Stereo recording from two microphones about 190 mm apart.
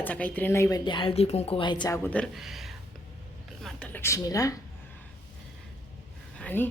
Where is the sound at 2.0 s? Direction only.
5° left (ahead or behind).